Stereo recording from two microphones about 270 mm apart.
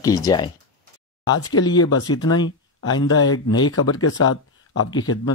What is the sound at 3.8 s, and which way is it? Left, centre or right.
Speech, left.